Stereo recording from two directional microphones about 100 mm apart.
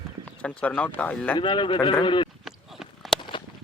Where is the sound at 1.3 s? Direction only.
55° left (ahead or behind).